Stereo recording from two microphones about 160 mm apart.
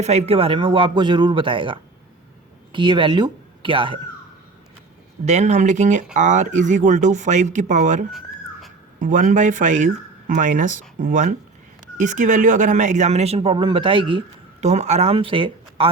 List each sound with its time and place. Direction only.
0.0 s speech: 45° right (ahead or behind)
5.2 s speech: 45° right (ahead or behind)
14.6 s speech: 45° right (ahead or behind)